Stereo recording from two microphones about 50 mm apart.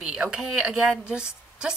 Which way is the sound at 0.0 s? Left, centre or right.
Centre.